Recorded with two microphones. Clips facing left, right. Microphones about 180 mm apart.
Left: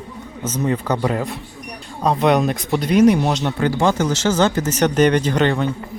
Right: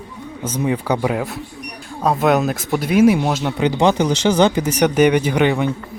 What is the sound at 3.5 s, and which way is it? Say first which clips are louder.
A man's voice: right 5 dB; 20° right (ahead or behind).